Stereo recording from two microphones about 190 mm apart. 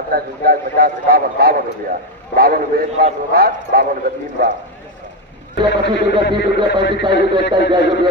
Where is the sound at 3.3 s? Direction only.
50° right (ahead or behind).